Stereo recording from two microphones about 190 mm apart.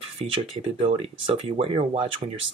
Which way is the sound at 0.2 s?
30° right (ahead or behind).